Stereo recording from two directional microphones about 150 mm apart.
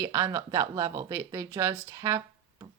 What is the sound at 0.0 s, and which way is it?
Speech, 20° right (ahead or behind).